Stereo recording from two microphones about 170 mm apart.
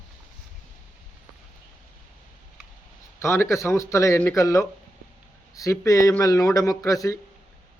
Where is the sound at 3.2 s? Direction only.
15° left (ahead or behind).